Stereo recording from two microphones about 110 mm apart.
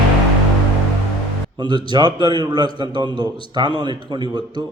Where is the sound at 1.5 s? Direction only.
45° right (ahead or behind).